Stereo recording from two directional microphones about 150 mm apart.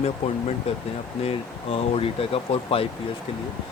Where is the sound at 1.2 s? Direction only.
40° left (ahead or behind).